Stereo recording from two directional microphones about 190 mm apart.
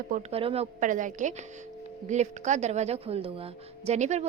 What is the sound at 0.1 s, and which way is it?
Speech, 35° right (ahead or behind).